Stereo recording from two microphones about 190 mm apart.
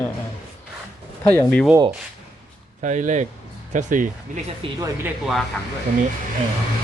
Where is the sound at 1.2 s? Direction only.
5° left (ahead or behind).